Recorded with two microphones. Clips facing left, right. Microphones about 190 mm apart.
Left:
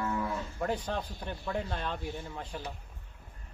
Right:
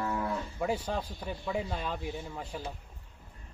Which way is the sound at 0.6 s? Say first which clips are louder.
Right 1 dB; 5° right (ahead or behind).